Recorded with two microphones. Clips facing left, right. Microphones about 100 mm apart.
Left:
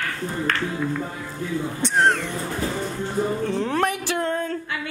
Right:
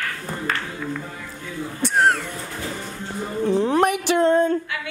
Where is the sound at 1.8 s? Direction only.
5° right (ahead or behind).